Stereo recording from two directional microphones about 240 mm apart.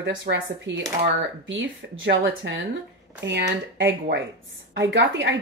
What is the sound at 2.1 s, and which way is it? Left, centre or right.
Speech, right.